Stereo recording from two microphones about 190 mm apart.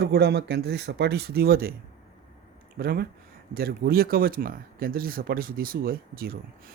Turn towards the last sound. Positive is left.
turn(degrees=-50)  # may be behind; listen again after turning